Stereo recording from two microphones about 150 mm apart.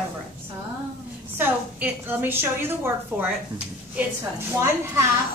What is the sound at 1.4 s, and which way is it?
A woman's voice, 10° right (ahead or behind).